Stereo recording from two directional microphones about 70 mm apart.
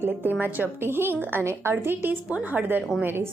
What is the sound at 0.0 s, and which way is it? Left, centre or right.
A woman's voice, right.